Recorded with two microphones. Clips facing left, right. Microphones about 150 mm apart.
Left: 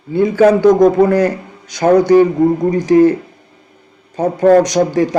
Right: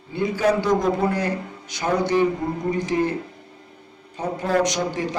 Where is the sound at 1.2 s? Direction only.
40° left (ahead or behind).